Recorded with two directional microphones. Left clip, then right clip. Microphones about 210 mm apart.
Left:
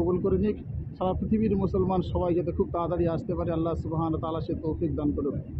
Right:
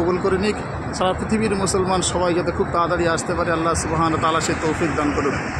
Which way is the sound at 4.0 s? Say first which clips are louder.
Right 14 dB; 35° right (ahead or behind).